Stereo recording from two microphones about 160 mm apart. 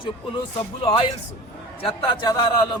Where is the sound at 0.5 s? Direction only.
35° left (ahead or behind).